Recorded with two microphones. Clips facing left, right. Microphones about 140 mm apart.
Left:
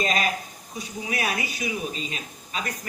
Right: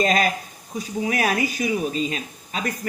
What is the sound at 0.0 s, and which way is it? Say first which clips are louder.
Speech: right 5 dB; 45° right (ahead or behind).